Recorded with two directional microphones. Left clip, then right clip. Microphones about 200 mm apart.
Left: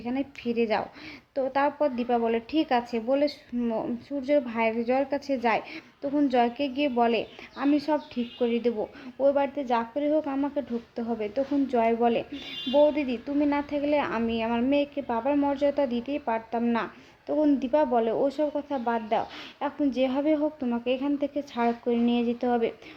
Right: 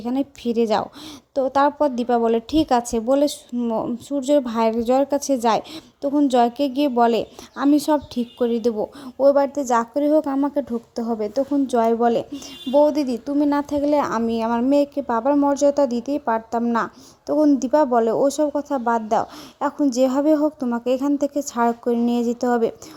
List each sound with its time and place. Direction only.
0.0 s a woman's voice: 50° right (ahead or behind)